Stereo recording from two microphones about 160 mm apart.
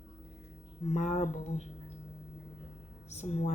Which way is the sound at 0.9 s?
45° left (ahead or behind).